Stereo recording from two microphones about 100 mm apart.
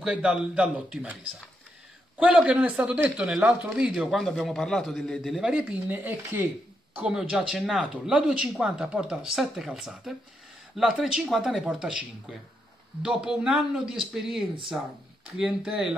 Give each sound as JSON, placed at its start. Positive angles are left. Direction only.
{"t": 0.0, "sound": "speech", "side_deg": -10}
{"t": 2.1, "sound": "a man's voice", "side_deg": -15}
{"t": 5.3, "sound": "speech", "side_deg": -10}
{"t": 7.7, "sound": "a man's voice", "side_deg": -10}